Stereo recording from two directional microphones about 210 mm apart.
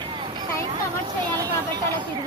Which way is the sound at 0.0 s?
25° right (ahead or behind).